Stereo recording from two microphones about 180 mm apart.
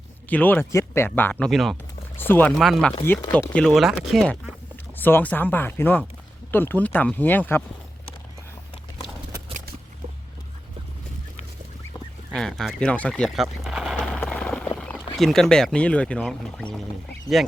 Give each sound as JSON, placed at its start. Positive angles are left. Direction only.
{"t": 0.3, "sound": "speech", "side_deg": 10}
{"t": 2.1, "sound": "a sound", "side_deg": 10}
{"t": 2.6, "sound": "speech", "side_deg": 0}
{"t": 3.0, "sound": "speech", "side_deg": 15}
{"t": 3.5, "sound": "speech", "side_deg": 5}
{"t": 4.9, "sound": "speech", "side_deg": 10}
{"t": 12.3, "sound": "a sound", "side_deg": 5}
{"t": 15.2, "sound": "speech", "side_deg": 0}